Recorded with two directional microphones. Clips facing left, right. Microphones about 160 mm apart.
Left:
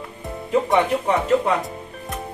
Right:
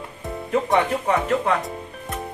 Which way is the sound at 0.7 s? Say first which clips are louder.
Even; 15° left (ahead or behind).